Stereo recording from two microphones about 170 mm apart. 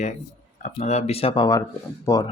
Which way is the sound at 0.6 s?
40° left (ahead or behind).